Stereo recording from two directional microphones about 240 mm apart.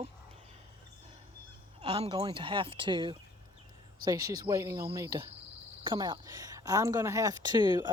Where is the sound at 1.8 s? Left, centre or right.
Right.